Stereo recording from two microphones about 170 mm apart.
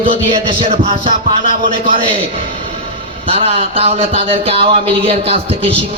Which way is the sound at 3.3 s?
35° right (ahead or behind).